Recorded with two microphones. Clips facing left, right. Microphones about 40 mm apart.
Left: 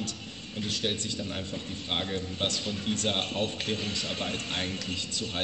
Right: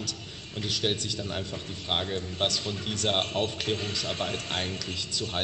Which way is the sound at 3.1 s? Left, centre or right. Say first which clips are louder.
Right 2 dB; right.